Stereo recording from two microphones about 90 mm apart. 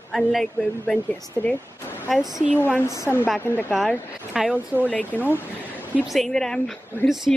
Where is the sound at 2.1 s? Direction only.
Centre (ahead or behind).